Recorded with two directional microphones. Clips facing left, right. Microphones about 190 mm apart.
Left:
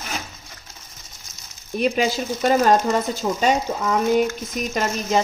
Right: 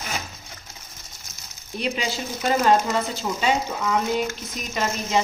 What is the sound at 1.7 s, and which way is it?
Speech, 50° left (ahead or behind).